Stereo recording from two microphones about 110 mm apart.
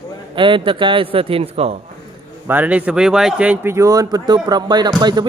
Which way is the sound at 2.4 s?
15° right (ahead or behind).